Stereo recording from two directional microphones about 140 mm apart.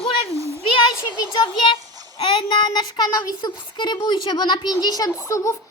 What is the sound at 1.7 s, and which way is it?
A child's voice, 35° left (ahead or behind).